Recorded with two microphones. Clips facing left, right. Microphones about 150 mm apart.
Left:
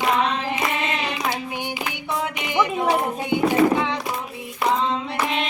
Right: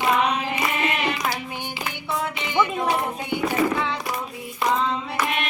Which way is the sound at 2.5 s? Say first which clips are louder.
Left 2 dB; 15° left (ahead or behind).